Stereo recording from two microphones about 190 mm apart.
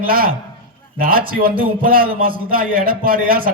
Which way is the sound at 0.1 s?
50° right (ahead or behind).